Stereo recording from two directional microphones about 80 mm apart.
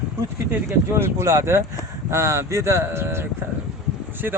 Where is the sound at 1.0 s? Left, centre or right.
Right.